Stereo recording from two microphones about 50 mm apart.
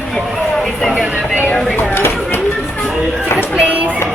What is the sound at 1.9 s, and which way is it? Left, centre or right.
Chop, left.